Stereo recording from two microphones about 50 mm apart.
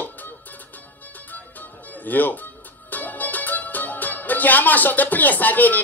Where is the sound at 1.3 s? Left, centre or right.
Left.